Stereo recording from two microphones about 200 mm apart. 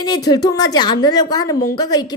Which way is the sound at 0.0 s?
20° left (ahead or behind).